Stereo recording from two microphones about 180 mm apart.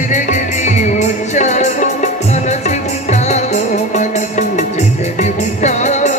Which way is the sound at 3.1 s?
40° left (ahead or behind).